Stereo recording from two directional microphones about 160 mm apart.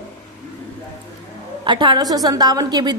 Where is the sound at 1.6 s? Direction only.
30° right (ahead or behind).